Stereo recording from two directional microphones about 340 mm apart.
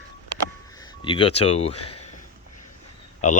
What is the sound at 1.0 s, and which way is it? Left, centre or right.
Speech, centre.